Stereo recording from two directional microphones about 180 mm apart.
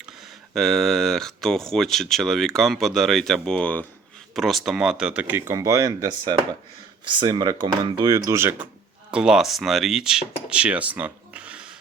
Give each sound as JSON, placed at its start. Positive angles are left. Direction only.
{"t": 0.5, "sound": "speech", "side_deg": 0}